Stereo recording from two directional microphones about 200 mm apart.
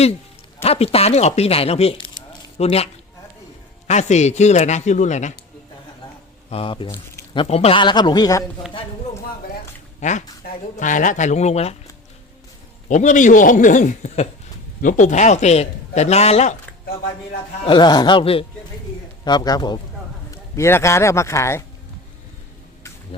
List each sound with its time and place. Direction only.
0.6 s a man's voice: 30° left (ahead or behind)
6.5 s a man's voice: 25° left (ahead or behind)
10.0 s a man's voice: 35° left (ahead or behind)
12.9 s a man's voice: 40° left (ahead or behind)
17.6 s a man's voice: 25° left (ahead or behind)